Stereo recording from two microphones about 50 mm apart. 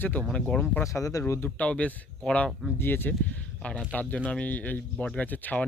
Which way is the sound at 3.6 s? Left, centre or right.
Left.